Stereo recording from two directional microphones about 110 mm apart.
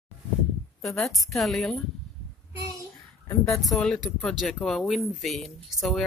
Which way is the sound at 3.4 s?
Centre (ahead or behind).